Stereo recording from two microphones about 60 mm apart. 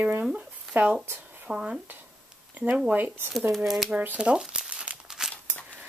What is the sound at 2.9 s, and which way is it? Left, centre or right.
Speech, right.